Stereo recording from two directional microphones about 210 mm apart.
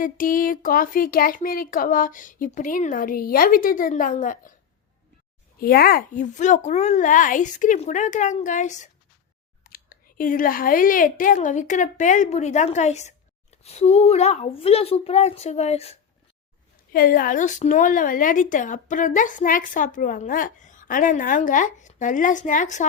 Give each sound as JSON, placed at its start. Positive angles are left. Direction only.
{"t": 0.0, "sound": "speech", "side_deg": 40}
{"t": 5.5, "sound": "speech", "side_deg": 45}
{"t": 16.9, "sound": "speech", "side_deg": 45}